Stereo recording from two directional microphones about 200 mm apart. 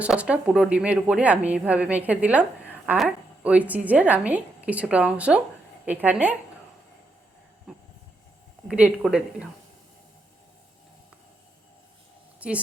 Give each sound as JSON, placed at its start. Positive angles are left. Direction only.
{"t": 0.0, "sound": "a woman's voice", "side_deg": -5}
{"t": 7.7, "sound": "train", "side_deg": -5}
{"t": 8.6, "sound": "a woman's voice", "side_deg": -5}
{"t": 12.4, "sound": "a woman's voice", "side_deg": -5}